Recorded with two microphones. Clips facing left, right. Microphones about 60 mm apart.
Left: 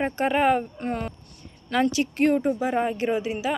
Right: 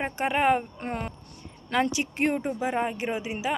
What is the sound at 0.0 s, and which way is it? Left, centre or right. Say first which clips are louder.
A woman's voice: left 3 dB; centre.